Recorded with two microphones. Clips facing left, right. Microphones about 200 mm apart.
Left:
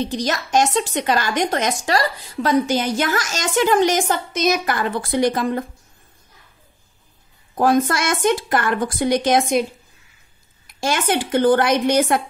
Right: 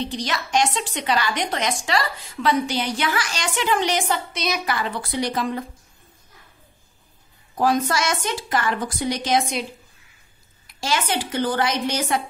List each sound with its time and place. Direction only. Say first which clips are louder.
0.0 s a woman's voice: left 4 dB; 45° left (ahead or behind)
7.5 s a woman's voice: left 4 dB; 55° left (ahead or behind)
10.8 s a woman's voice: left 4 dB; 50° left (ahead or behind)